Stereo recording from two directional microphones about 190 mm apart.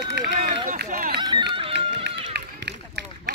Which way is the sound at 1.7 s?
65° right (ahead or behind).